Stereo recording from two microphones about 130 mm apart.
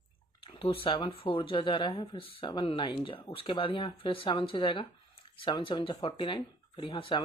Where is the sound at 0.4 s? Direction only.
40° left (ahead or behind).